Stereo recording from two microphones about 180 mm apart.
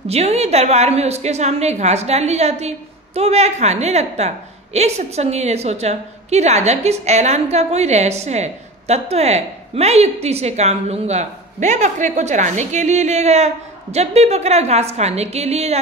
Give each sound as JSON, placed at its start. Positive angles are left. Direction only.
{"t": 0.1, "sound": "a woman's voice", "side_deg": -35}